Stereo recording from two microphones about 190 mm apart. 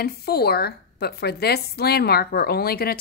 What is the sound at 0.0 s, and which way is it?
A woman's voice, 55° left (ahead or behind).